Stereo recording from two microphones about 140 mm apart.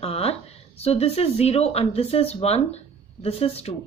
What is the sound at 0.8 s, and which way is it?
Speech, 45° left (ahead or behind).